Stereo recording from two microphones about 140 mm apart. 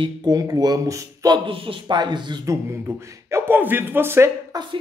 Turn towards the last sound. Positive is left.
turn(degrees=-20)  # may be behind; listen again after turning